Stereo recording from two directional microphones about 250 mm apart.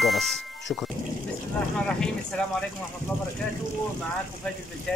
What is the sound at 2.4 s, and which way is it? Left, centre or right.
Speech, centre.